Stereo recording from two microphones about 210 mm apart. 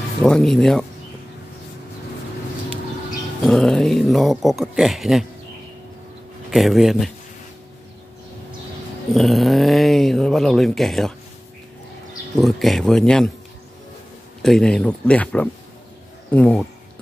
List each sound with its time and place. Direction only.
0.2 s speech: centre (ahead or behind)
3.4 s speech: centre (ahead or behind)
6.5 s speech: centre (ahead or behind)
9.1 s speech: centre (ahead or behind)
12.4 s speech: centre (ahead or behind)
14.4 s speech: 5° left (ahead or behind)